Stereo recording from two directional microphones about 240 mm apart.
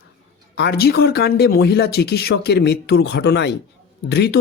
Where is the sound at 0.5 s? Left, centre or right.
Left.